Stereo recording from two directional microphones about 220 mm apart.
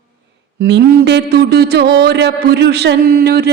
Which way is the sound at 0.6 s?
50° right (ahead or behind).